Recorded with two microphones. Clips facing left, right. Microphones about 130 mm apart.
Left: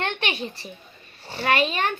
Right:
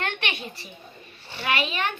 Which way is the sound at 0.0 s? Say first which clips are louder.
Left 3 dB; 30° left (ahead or behind).